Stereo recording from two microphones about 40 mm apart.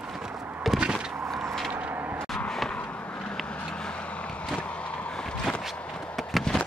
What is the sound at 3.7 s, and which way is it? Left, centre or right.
Vehicle, left.